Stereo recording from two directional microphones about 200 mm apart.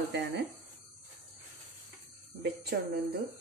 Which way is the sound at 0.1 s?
70° right (ahead or behind).